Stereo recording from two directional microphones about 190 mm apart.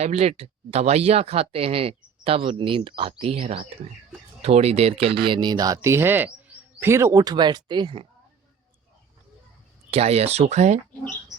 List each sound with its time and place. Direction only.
0.0 s speech: 35° right (ahead or behind)
9.9 s speech: 30° right (ahead or behind)